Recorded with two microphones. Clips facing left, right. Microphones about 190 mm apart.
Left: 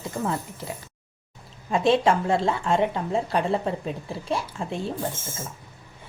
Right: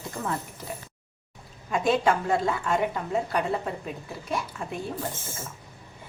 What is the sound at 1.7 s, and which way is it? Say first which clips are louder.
A woman's voice: left 3 dB; 25° left (ahead or behind).